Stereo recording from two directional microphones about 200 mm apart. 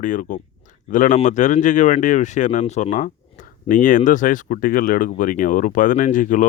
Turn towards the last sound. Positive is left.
turn(degrees=40)  # may be behind; listen again after turning